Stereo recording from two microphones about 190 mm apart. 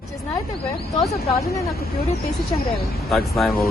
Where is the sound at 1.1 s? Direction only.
35° left (ahead or behind).